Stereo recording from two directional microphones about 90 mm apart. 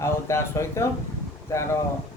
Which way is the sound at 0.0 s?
30° left (ahead or behind).